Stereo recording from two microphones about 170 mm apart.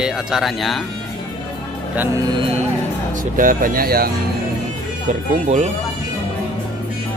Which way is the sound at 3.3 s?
55° right (ahead or behind).